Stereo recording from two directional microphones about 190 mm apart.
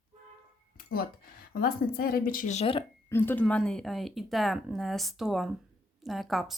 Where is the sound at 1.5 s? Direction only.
50° left (ahead or behind); by 2.8 s 35° left (ahead or behind).